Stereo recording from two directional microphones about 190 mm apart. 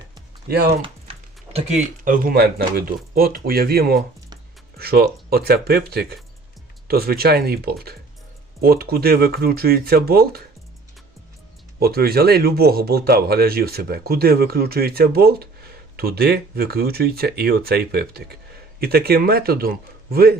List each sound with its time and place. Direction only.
0.4 s speech: 55° right (ahead or behind)
0.7 s speech: 30° right (ahead or behind); by 10.4 s 55° right (ahead or behind)
11.8 s speech: 55° right (ahead or behind)